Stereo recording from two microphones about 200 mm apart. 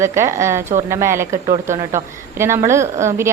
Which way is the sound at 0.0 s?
15° right (ahead or behind).